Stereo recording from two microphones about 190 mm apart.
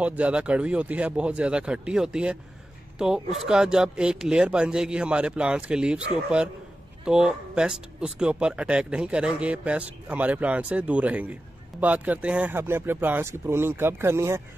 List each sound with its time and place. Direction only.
0.0 s speech: 5° right (ahead or behind)
3.3 s speech: 5° right (ahead or behind)